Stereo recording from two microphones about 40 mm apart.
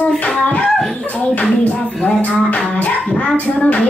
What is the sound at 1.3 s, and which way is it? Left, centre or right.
Music, left.